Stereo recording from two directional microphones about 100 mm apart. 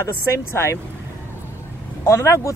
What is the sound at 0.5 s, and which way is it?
Speech, 25° left (ahead or behind).